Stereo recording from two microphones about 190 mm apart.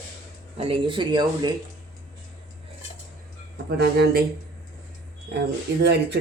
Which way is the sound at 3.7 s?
55° right (ahead or behind).